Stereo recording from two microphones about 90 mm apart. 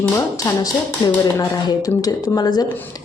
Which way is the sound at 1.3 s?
45° left (ahead or behind).